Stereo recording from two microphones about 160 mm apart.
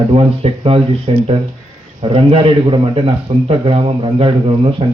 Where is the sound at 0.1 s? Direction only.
35° right (ahead or behind).